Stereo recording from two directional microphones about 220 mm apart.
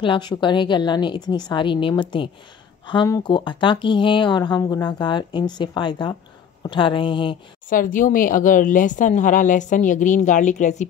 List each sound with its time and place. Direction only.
0.0 s speech: 20° left (ahead or behind)
7.7 s speech: 35° left (ahead or behind)